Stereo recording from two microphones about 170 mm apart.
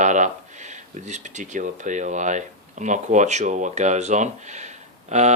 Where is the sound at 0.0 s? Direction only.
45° right (ahead or behind).